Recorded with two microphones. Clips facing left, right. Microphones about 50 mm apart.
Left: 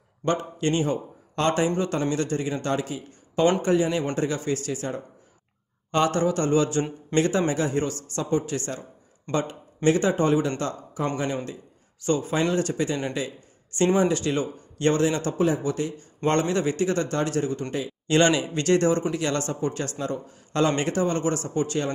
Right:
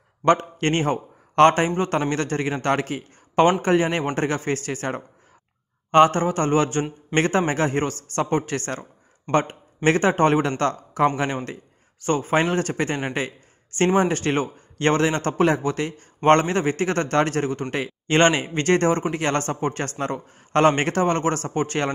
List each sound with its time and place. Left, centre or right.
0.2 s a man's voice: right
12.0 s a man's voice: right
18.0 s speech: right